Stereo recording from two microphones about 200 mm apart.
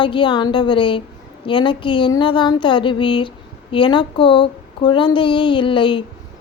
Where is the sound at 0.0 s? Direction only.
25° left (ahead or behind).